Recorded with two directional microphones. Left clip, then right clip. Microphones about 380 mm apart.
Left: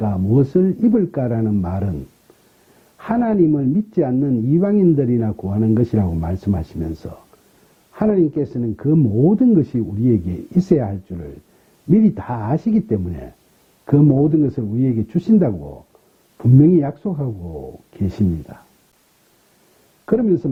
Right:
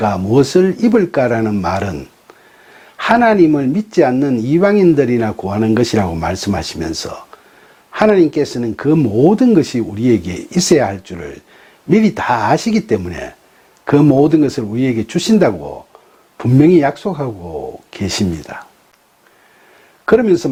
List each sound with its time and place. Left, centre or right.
0.0 s speech: centre
3.0 s speech: centre
14.4 s speech: centre
15.5 s speech: centre
16.4 s speech: centre
17.9 s speech: centre
20.1 s speech: centre